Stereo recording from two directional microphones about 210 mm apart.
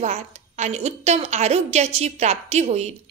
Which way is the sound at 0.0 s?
30° right (ahead or behind).